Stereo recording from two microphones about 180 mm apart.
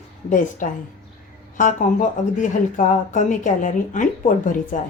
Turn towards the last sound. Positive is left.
turn(degrees=45)  # may be behind; listen again after turning